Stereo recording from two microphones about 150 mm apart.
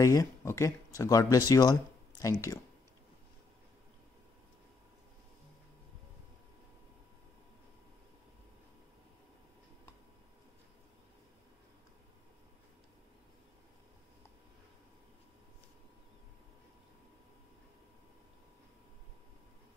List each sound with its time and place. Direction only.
0.0 s speech: 20° left (ahead or behind)